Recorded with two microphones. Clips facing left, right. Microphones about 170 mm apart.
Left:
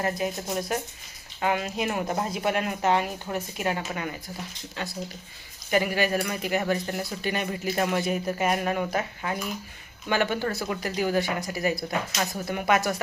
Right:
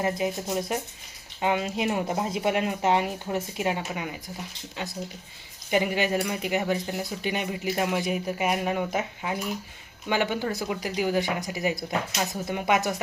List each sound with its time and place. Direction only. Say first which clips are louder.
0.0 s speech: right 1 dB; 25° right (ahead or behind)